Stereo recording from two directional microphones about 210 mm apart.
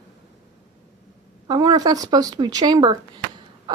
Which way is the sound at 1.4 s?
20° right (ahead or behind).